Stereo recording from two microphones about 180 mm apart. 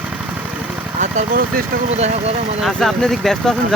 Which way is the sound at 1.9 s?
35° right (ahead or behind).